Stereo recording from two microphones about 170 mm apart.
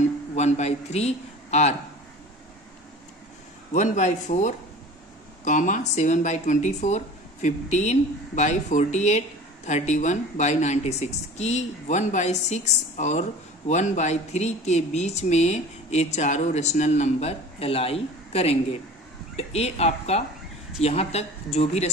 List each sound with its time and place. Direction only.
0.3 s a man's voice: 40° left (ahead or behind)
3.7 s speech: 45° left (ahead or behind)